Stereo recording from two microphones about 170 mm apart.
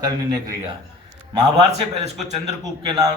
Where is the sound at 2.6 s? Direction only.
20° right (ahead or behind).